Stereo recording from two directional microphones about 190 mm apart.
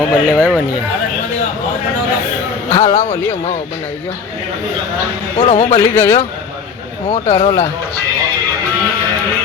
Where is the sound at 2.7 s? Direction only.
15° left (ahead or behind).